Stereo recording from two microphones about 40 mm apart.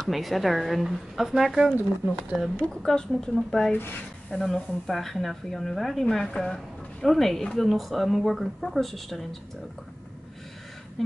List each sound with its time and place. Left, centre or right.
0.1 s speech: centre
2.7 s a woman's voice: centre
3.7 s speech: left
4.3 s speech: centre
6.1 s a woman's voice: centre
11.0 s a sound: centre